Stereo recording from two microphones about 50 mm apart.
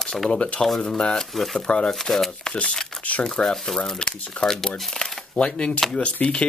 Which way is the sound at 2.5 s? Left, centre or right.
Centre.